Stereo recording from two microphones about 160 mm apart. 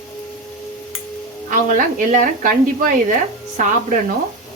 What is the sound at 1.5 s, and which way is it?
A woman's voice, 55° right (ahead or behind).